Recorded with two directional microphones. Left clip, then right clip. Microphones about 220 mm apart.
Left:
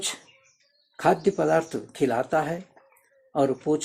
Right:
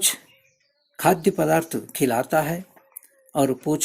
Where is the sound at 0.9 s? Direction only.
40° right (ahead or behind).